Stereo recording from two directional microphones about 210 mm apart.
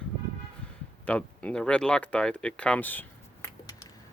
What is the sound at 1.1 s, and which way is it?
Speech, 5° left (ahead or behind).